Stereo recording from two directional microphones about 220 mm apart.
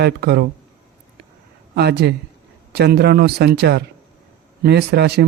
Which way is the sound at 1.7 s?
50° right (ahead or behind).